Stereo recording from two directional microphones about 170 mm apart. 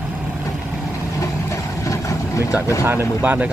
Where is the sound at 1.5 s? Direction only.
20° left (ahead or behind).